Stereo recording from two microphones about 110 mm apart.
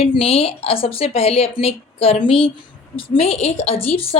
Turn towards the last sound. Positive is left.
turn(degrees=60)  # may be behind; listen again after turning